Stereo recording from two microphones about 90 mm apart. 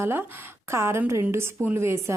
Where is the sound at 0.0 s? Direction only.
25° right (ahead or behind).